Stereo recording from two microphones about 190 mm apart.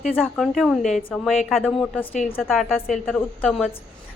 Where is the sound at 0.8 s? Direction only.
40° left (ahead or behind).